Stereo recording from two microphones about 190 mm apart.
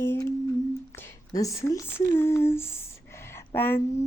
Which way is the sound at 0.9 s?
15° left (ahead or behind).